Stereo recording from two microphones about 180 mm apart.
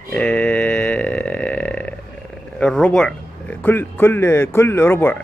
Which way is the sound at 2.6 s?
5° left (ahead or behind).